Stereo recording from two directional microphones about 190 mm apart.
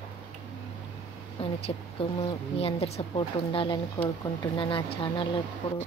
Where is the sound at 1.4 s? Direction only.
30° left (ahead or behind).